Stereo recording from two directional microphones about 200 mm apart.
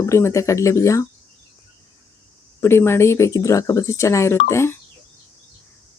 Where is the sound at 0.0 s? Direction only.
15° left (ahead or behind).